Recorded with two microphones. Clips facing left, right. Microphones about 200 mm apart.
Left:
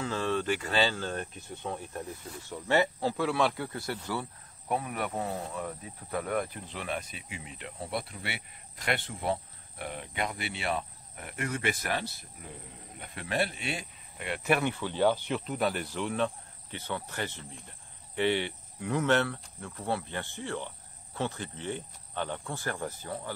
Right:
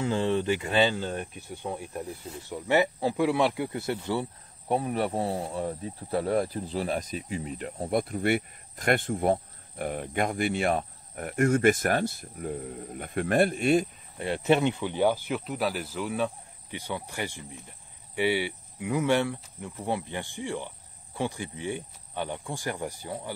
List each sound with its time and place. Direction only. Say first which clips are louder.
0.0 s speech: right 4 dB; 25° right (ahead or behind); by 14.2 s 45° right (ahead or behind)
14.2 s speech: right 5 dB; 30° right (ahead or behind)